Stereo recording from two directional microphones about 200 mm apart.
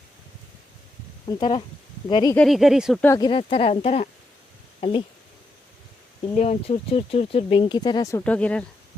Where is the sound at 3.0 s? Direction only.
20° left (ahead or behind).